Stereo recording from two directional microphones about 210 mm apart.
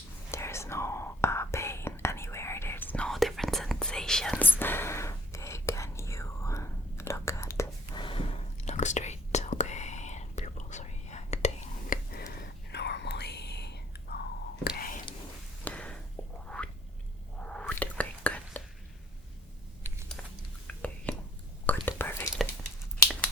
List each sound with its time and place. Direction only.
0.3 s whispering: 15° left (ahead or behind)
8.0 s whispering: 25° left (ahead or behind)
12.7 s whispering: 55° left (ahead or behind)
14.8 s whispering: 40° left (ahead or behind)
15.6 s a sound: 5° left (ahead or behind)
17.4 s whispering: 5° left (ahead or behind)
20.8 s whispering: 5° left (ahead or behind)